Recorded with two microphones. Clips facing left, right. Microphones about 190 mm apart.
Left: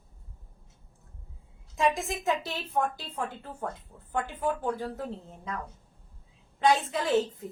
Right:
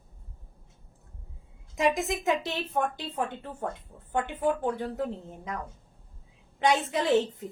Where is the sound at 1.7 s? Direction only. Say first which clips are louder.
Right 1 dB; 20° right (ahead or behind).